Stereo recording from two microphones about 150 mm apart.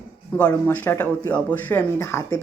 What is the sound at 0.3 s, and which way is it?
Speech, 10° left (ahead or behind).